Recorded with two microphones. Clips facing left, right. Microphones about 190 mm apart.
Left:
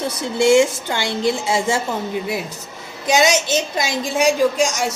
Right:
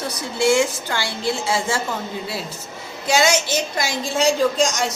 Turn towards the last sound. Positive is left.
turn(degrees=10)  # may be behind; listen again after turning